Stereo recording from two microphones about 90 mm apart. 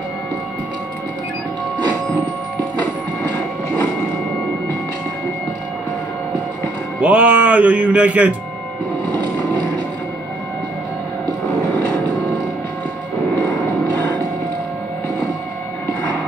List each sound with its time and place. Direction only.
2.8 s train: 20° left (ahead or behind)
7.0 s speech: 15° right (ahead or behind)